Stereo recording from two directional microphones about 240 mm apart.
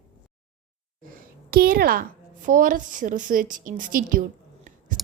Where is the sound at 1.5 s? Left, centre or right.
Right.